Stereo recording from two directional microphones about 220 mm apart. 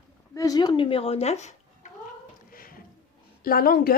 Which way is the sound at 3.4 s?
40° left (ahead or behind).